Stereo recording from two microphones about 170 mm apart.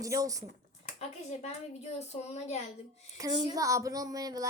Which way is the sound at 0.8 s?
40° left (ahead or behind).